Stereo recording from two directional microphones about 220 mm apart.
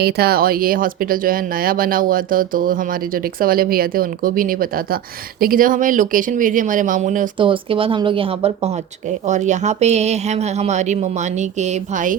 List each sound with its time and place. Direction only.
0.0 s speech: 45° right (ahead or behind)
7.3 s speech: 25° right (ahead or behind)